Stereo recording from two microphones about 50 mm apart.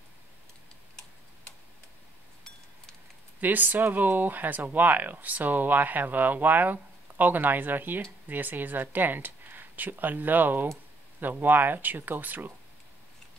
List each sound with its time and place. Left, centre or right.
3.3 s speech: right